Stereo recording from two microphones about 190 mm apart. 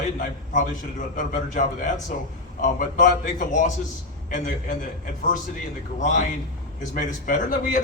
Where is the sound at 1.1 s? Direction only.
40° left (ahead or behind).